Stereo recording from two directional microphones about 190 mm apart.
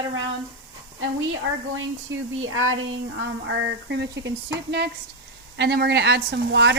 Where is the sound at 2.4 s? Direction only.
90° right.